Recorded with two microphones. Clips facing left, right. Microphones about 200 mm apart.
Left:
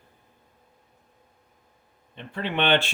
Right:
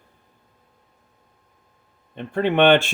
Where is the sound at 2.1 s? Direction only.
50° right (ahead or behind).